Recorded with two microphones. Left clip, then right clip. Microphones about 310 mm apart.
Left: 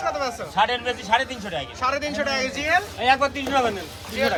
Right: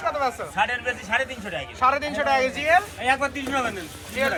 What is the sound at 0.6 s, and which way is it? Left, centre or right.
A man's voice, centre.